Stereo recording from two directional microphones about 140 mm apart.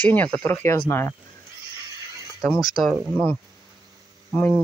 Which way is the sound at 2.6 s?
Centre (ahead or behind).